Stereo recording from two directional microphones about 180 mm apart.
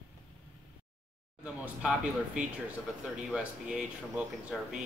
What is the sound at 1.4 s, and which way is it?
Speech, 5° right (ahead or behind).